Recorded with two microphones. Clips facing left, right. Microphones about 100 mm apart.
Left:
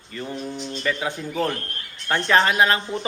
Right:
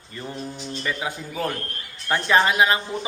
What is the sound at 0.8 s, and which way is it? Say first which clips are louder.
A man's voice: left 3 dB; 10° right (ahead or behind).